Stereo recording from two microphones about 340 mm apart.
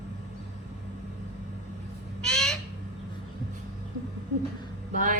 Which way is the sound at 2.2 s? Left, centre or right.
Centre.